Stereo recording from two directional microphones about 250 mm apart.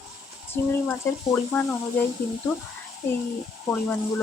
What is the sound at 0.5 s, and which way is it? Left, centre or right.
Speech, centre.